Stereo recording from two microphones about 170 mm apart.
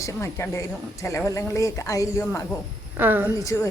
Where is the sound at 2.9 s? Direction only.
10° right (ahead or behind).